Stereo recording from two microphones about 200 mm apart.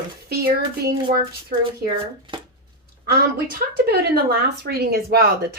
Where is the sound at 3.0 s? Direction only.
50° right (ahead or behind).